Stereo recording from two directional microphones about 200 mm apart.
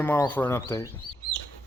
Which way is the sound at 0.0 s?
10° left (ahead or behind).